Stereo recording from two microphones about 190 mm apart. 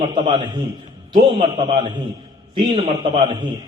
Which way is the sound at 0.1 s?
25° right (ahead or behind).